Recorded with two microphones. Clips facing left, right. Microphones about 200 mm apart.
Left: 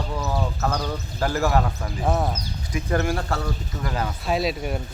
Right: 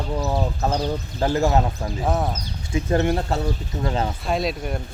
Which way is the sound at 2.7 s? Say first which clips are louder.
Right 3 dB; 25° right (ahead or behind).